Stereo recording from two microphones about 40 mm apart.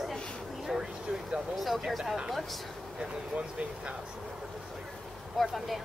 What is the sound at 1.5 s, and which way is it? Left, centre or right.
Speech, centre.